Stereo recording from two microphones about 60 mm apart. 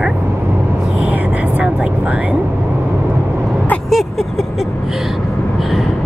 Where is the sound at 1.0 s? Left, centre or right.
Right.